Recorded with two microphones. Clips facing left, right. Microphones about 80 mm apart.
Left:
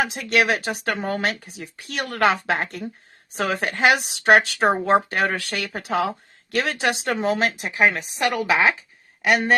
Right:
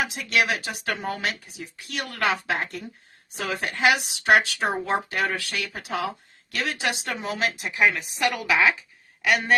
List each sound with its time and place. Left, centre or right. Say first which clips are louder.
0.0 s speech: left 4 dB; left